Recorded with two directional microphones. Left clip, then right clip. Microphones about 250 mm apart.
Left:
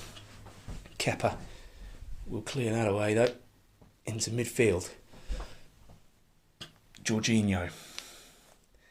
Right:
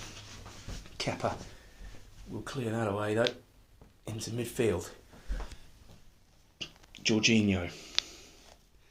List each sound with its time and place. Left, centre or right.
0.9 s speech: left
2.5 s speech: left
7.1 s speech: left
8.0 s a sound: centre